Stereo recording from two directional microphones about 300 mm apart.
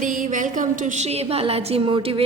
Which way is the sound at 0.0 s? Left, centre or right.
Right.